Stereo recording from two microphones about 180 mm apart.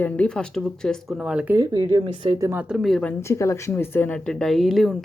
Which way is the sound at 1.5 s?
20° right (ahead or behind).